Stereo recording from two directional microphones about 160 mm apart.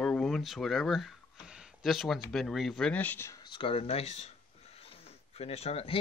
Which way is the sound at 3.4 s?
35° left (ahead or behind).